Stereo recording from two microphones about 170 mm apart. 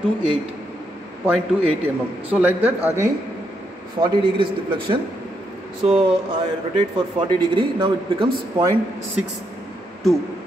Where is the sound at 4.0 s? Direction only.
30° right (ahead or behind).